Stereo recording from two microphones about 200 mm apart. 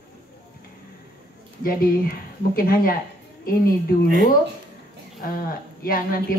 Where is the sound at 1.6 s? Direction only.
45° left (ahead or behind).